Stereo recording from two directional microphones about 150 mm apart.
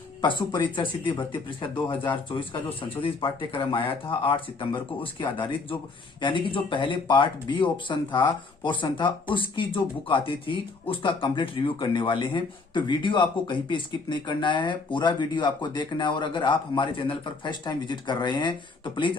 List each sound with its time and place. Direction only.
0.2 s speech: 30° left (ahead or behind)